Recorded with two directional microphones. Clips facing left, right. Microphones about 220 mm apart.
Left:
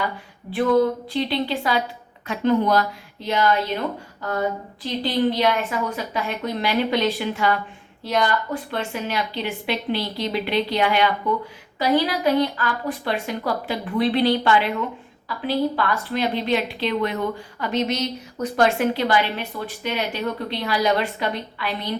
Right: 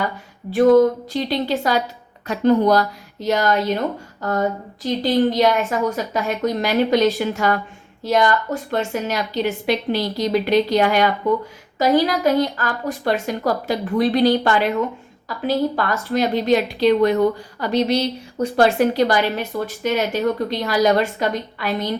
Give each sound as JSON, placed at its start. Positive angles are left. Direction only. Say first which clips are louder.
{"t": 0.5, "sound": "a woman's voice", "louder": "right 6 dB", "side_deg": -45}